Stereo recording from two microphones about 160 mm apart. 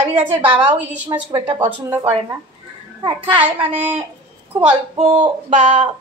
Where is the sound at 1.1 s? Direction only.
25° right (ahead or behind).